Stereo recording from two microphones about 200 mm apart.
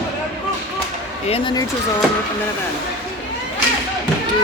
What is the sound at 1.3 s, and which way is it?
Speech, 25° left (ahead or behind).